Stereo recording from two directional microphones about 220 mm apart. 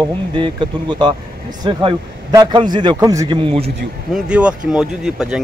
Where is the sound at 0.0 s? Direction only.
20° right (ahead or behind).